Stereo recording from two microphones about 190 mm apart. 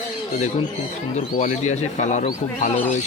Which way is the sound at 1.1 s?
35° left (ahead or behind).